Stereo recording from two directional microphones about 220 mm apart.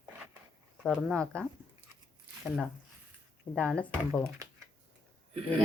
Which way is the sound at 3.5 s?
5° left (ahead or behind).